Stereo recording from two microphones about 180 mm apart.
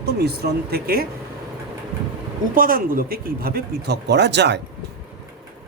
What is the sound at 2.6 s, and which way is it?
Speech, 50° right (ahead or behind).